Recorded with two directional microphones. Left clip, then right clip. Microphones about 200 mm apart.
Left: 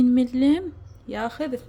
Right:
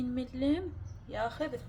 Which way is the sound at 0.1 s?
55° left (ahead or behind).